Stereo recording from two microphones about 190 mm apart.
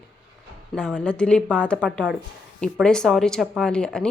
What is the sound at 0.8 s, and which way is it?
A woman's voice, centre (ahead or behind).